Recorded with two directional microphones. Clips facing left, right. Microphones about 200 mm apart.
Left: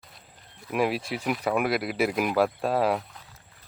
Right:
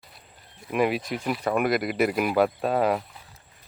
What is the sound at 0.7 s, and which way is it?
Speech, centre (ahead or behind).